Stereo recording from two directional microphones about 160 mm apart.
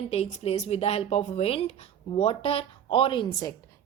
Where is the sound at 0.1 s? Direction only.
40° left (ahead or behind).